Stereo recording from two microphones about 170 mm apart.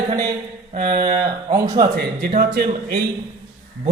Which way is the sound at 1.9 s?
60° right (ahead or behind).